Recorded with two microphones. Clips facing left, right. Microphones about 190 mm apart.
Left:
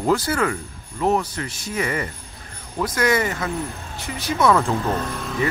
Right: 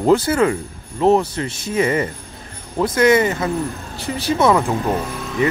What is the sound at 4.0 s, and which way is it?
Speech, 30° right (ahead or behind).